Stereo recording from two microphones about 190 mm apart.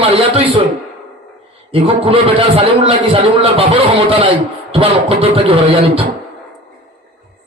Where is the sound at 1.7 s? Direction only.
30° right (ahead or behind).